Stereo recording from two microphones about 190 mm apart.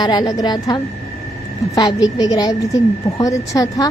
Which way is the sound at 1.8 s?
20° left (ahead or behind).